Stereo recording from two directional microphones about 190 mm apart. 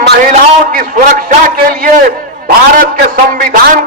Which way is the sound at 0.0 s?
60° right (ahead or behind).